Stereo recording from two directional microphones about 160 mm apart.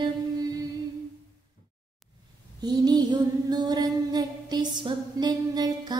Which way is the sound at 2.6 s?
25° right (ahead or behind).